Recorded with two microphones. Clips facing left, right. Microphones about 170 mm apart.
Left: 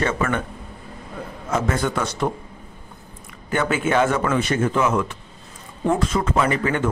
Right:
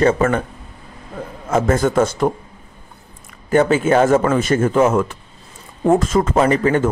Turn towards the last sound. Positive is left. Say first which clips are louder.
# right 6 dB
turn(degrees=-35)  # may be behind; listen again after turning